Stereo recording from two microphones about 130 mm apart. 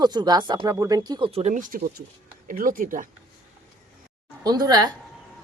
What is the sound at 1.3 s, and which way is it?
Speech, 55° right (ahead or behind).